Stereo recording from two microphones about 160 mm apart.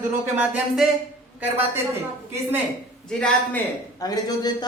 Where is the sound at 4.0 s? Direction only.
25° left (ahead or behind).